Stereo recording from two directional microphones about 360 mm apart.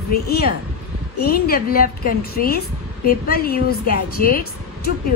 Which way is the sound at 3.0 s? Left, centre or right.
Left.